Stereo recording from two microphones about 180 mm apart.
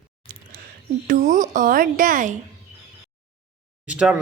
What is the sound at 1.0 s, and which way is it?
A woman's voice, 50° right (ahead or behind).